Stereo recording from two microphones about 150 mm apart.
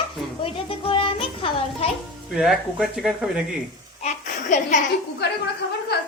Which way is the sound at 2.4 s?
5° right (ahead or behind).